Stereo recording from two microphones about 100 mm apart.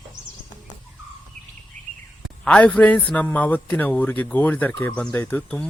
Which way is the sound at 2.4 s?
10° left (ahead or behind).